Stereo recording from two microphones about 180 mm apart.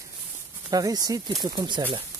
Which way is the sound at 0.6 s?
20° right (ahead or behind).